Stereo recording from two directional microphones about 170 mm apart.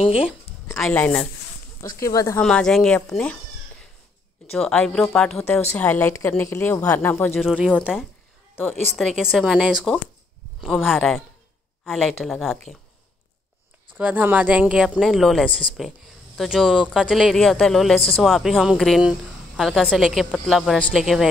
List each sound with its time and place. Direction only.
0.0 s speech: 35° left (ahead or behind)
0.9 s a woman's voice: 10° left (ahead or behind)
2.4 s speech: 5° left (ahead or behind)
4.5 s a woman's voice: 5° left (ahead or behind)
7.3 s speech: centre (ahead or behind)
13.9 s speech: 10° right (ahead or behind)